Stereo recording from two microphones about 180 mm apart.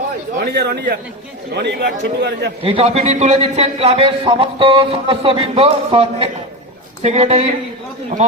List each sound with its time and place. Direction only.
0.3 s a man's voice: 55° right (ahead or behind)
1.5 s speech: 70° right (ahead or behind)
2.6 s a man's voice: 35° right (ahead or behind)